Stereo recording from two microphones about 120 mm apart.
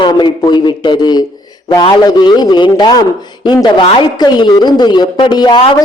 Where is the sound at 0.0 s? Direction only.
40° left (ahead or behind).